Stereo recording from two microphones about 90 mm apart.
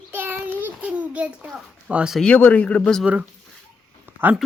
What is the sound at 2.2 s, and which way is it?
Speech, 15° left (ahead or behind).